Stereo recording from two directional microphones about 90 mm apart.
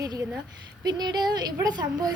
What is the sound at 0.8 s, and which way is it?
A child's voice, 50° right (ahead or behind).